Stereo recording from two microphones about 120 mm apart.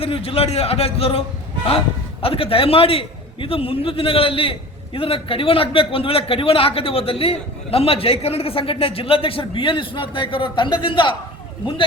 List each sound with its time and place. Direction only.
0.0 s a man's voice: 50° left (ahead or behind)
2.2 s a man's voice: 50° left (ahead or behind)